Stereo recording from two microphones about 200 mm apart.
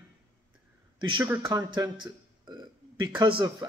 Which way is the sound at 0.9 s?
20° right (ahead or behind).